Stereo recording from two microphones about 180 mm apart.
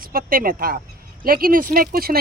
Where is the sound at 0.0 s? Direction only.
55° right (ahead or behind).